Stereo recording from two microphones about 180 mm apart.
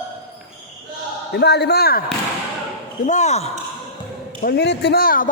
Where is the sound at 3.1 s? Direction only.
40° left (ahead or behind).